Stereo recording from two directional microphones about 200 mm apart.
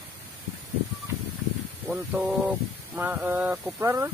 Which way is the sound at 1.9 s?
10° right (ahead or behind).